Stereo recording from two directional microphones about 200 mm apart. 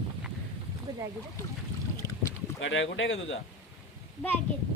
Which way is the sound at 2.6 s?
70° left (ahead or behind).